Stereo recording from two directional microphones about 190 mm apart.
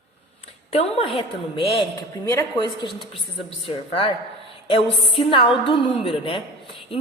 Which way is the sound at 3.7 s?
30° left (ahead or behind).